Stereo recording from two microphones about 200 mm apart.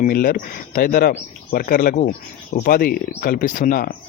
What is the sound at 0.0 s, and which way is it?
Speech, 45° left (ahead or behind).